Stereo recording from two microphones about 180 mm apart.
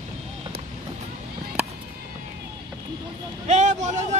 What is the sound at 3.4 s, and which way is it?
Vehicle, 40° right (ahead or behind).